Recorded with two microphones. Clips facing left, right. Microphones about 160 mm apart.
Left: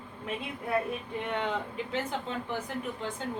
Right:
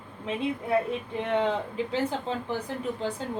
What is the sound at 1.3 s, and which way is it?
A woman's voice, 30° right (ahead or behind).